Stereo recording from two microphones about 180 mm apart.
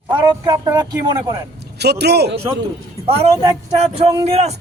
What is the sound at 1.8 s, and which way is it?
Speech, 65° right (ahead or behind).